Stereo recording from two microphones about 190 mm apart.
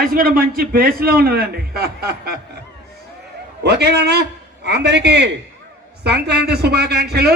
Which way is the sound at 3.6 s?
60° right (ahead or behind).